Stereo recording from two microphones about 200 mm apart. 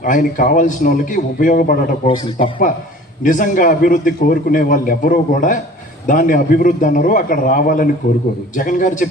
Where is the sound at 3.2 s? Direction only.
40° left (ahead or behind).